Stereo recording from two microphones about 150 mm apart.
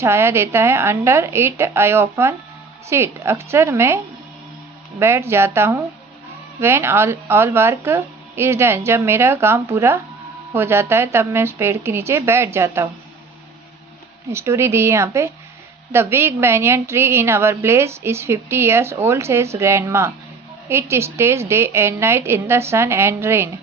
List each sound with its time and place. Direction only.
0.0 s a woman's voice: 15° right (ahead or behind)
14.3 s a woman's voice: 15° right (ahead or behind)